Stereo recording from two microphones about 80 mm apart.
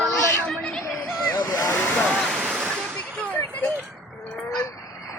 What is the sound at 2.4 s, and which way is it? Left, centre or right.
Waterfall, centre.